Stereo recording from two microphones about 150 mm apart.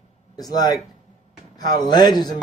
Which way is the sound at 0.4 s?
25° left (ahead or behind).